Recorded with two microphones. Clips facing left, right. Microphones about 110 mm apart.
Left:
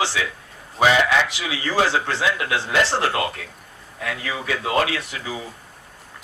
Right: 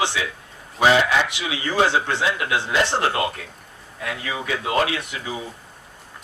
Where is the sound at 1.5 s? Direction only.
25° right (ahead or behind).